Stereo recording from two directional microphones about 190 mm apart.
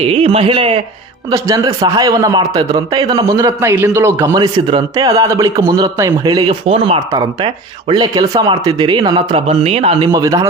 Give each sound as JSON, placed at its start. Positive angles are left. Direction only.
{"t": 0.0, "sound": "a man's voice", "side_deg": -30}
{"t": 1.3, "sound": "a man's voice", "side_deg": -15}
{"t": 10.1, "sound": "a man's voice", "side_deg": -15}